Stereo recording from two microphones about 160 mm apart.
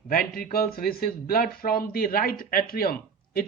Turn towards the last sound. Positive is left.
turn(degrees=70)  # may be behind; listen again after turning